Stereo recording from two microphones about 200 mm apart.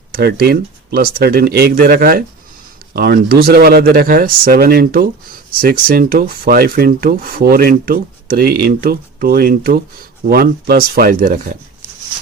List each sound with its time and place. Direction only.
0.1 s speech: 50° right (ahead or behind)